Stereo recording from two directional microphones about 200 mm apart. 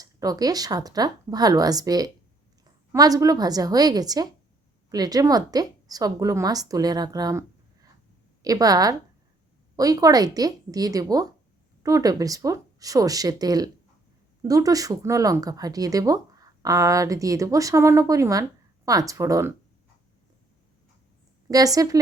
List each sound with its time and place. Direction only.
0.0 s a woman's voice: 20° right (ahead or behind)
21.5 s speech: 20° right (ahead or behind)